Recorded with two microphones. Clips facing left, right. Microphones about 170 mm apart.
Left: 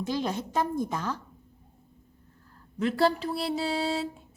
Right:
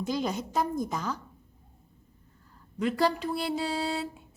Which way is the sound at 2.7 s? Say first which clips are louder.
Left 2 dB; 5° left (ahead or behind).